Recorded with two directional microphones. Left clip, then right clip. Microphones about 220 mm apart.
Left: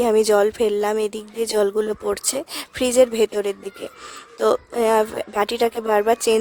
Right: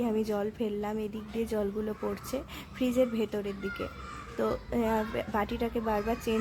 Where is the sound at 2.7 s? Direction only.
50° left (ahead or behind).